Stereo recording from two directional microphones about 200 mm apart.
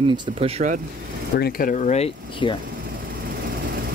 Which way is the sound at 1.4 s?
45° left (ahead or behind).